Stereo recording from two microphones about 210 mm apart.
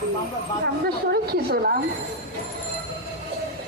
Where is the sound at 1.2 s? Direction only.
45° right (ahead or behind).